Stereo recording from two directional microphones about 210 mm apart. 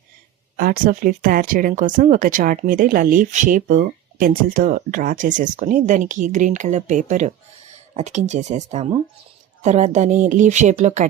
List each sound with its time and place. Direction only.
0.5 s speech: 40° right (ahead or behind)